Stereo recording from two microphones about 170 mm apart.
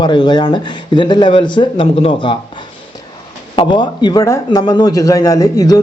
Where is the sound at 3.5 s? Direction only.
30° left (ahead or behind).